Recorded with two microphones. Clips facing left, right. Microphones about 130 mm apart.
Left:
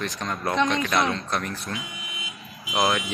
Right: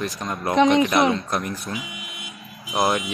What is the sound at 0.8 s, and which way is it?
Speech, 20° right (ahead or behind).